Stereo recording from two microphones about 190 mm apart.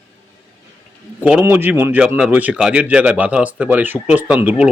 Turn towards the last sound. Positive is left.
turn(degrees=-5)  # may be behind; listen again after turning